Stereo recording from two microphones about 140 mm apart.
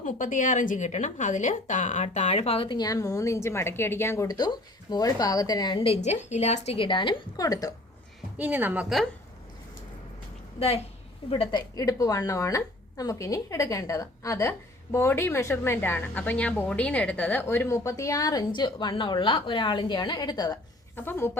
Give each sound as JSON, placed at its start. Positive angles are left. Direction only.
{"t": 0.0, "sound": "a woman's voice", "side_deg": 70}
{"t": 8.4, "sound": "a woman's voice", "side_deg": -10}
{"t": 11.3, "sound": "a woman's voice", "side_deg": 40}
{"t": 11.8, "sound": "a woman's voice", "side_deg": 25}
{"t": 20.9, "sound": "a woman's voice", "side_deg": 15}